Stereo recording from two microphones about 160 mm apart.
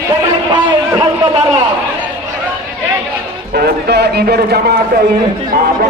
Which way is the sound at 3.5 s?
85° right.